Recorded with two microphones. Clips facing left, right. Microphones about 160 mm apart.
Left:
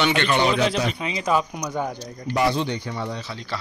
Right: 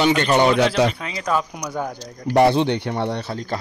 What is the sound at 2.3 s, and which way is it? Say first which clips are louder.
Speech: right 7 dB; 60° right (ahead or behind).